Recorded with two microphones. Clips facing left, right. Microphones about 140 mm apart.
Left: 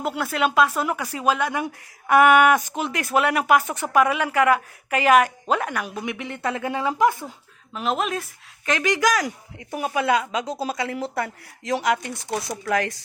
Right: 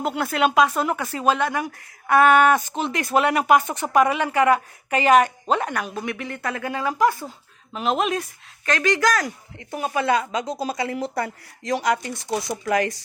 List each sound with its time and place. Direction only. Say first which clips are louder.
0.0 s a woman's voice: right 2 dB; centre (ahead or behind)
2.9 s a woman's voice: right 1 dB; 5° left (ahead or behind); by 7.3 s 20° left (ahead or behind)
7.7 s speech: right 2 dB; centre (ahead or behind)
8.6 s speech: right 1 dB; 15° left (ahead or behind); by 13.0 s centre (ahead or behind)